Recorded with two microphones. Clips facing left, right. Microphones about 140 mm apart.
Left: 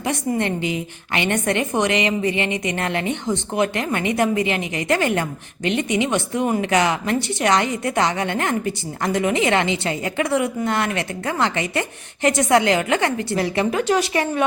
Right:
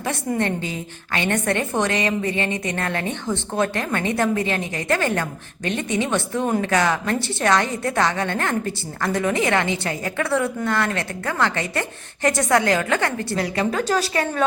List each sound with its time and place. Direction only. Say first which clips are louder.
0.0 s a woman's voice: left 1 dB; 15° left (ahead or behind)